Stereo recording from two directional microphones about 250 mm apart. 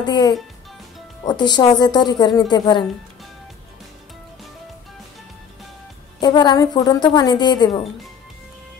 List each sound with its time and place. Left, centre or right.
0.0 s speech: centre
6.2 s speech: centre